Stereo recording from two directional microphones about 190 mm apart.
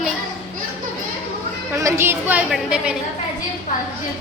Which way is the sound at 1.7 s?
15° right (ahead or behind).